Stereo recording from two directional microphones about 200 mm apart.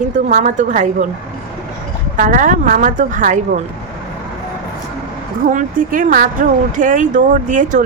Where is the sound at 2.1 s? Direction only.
40° right (ahead or behind).